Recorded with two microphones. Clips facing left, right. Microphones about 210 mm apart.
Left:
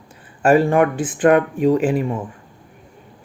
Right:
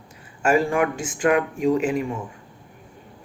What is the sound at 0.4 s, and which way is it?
Speech, 35° left (ahead or behind).